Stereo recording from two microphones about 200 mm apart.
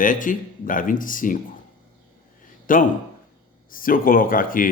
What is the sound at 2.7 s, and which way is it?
Speech, 40° left (ahead or behind).